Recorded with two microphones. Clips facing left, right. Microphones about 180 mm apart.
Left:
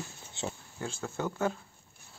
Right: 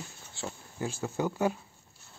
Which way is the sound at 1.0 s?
10° right (ahead or behind).